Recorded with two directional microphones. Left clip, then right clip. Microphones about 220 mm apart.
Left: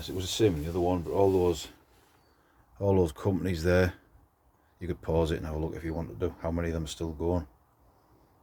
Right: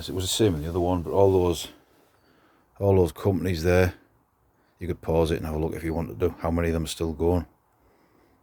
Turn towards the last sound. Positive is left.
turn(degrees=-40)  # may be behind; listen again after turning